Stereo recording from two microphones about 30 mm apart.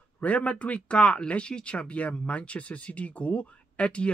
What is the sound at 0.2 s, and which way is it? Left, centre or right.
Speech, left.